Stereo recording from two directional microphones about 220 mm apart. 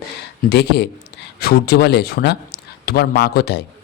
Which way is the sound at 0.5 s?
50° left (ahead or behind).